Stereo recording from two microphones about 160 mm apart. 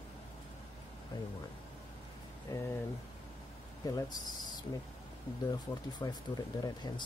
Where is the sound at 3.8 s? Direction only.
25° left (ahead or behind).